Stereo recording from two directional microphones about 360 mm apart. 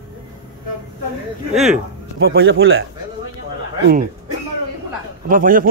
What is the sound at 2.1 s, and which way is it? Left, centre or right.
Speech, right.